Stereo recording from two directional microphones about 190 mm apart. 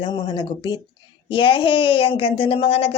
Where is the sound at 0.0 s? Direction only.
25° left (ahead or behind).